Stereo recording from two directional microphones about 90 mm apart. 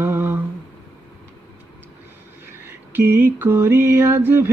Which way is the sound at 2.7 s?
25° right (ahead or behind).